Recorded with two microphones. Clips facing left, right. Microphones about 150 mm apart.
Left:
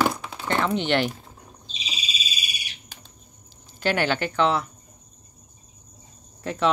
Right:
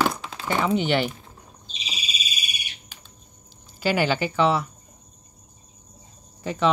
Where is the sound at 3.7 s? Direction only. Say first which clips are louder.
Right 1 dB; 5° right (ahead or behind).